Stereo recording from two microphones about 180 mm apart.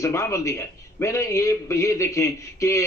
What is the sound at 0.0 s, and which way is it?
A man's voice, 15° left (ahead or behind).